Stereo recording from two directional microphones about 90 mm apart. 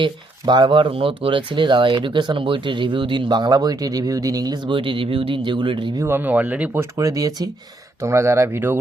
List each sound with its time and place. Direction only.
0.0 s speech: 55° right (ahead or behind)
6.0 s speech: 25° right (ahead or behind)
6.7 s speech: 35° right (ahead or behind)
8.0 s speech: 30° right (ahead or behind)